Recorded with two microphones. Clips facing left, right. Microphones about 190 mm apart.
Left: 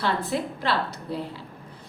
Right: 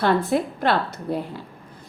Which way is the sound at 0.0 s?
50° right (ahead or behind).